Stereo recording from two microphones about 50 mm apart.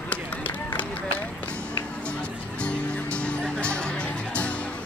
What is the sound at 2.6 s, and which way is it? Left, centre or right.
Music, left.